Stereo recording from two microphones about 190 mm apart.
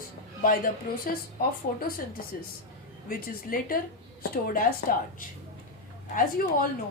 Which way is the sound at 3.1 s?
50° left (ahead or behind).